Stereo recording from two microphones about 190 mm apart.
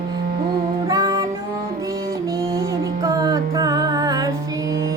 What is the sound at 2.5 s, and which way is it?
Music, 20° right (ahead or behind).